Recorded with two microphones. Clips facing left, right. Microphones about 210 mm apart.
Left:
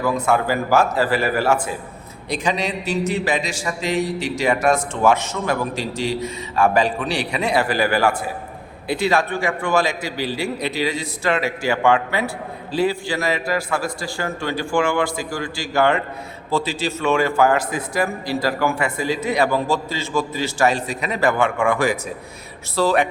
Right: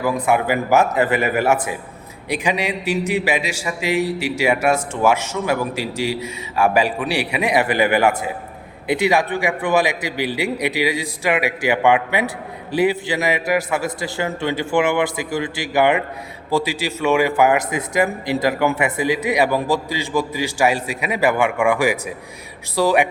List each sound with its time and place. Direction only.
0.0 s a man's voice: 15° right (ahead or behind)